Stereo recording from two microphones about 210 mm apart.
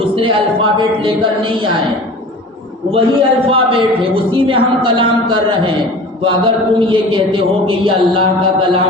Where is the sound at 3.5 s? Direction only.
25° right (ahead or behind).